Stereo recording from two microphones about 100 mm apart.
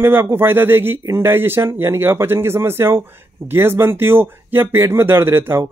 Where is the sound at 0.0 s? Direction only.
25° right (ahead or behind).